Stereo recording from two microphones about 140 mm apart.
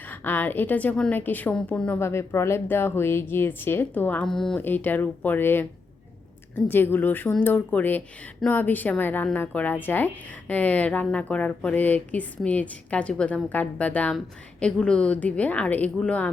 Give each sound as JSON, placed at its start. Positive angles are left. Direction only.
{"t": 0.0, "sound": "a woman's voice", "side_deg": 15}
{"t": 2.0, "sound": "a woman's voice", "side_deg": 20}
{"t": 6.7, "sound": "a woman's voice", "side_deg": 15}